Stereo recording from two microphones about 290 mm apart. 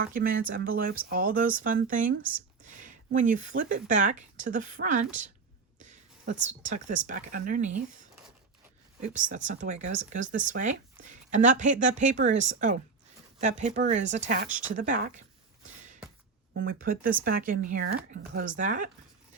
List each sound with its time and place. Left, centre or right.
0.0 s speech: right
2.6 s a sound: right
3.2 s speech: right
5.8 s a sound: right
6.7 s speech: right
9.0 s speech: right
16.6 s speech: right